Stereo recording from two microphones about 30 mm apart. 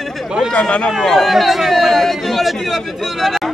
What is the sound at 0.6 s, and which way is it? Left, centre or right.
Speech, left.